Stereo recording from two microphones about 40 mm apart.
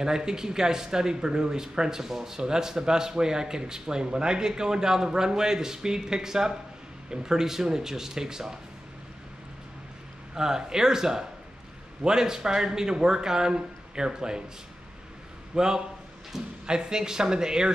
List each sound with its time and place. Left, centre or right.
0.0 s speech: centre
10.3 s speech: centre
15.5 s a man's voice: centre